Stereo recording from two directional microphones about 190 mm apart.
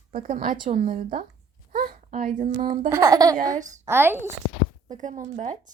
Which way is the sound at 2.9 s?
15° right (ahead or behind).